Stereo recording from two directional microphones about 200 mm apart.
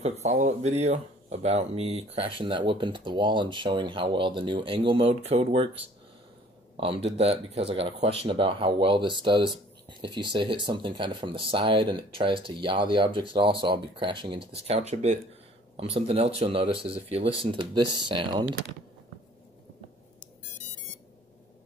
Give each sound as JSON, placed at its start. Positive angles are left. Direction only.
{"t": 0.2, "sound": "speech", "side_deg": -35}
{"t": 6.8, "sound": "speech", "side_deg": -30}